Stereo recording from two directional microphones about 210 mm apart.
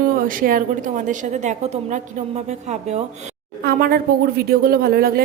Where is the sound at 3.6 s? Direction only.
45° right (ahead or behind).